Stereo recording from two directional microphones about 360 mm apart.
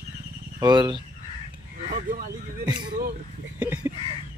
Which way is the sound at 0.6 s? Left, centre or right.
Centre.